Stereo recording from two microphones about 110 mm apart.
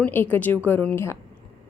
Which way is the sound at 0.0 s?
15° left (ahead or behind).